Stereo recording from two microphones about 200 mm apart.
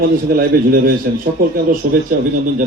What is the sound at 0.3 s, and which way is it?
A man's voice, 45° right (ahead or behind).